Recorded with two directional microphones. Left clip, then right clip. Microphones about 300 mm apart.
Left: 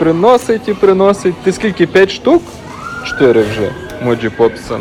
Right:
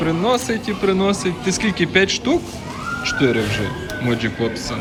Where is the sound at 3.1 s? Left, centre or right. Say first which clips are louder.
Left 10 dB; centre.